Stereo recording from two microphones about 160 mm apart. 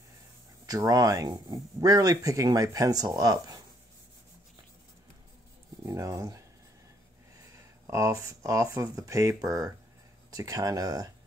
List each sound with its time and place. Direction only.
0.7 s speech: 25° right (ahead or behind)
5.9 s speech: 20° right (ahead or behind)
7.5 s speech: 20° right (ahead or behind)